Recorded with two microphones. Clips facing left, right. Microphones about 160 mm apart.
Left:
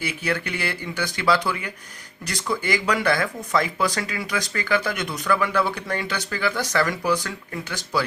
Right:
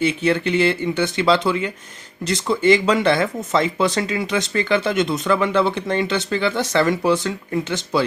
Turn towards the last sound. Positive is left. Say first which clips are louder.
# right 6 dB
turn(degrees=-25)  # may be behind; listen again after turning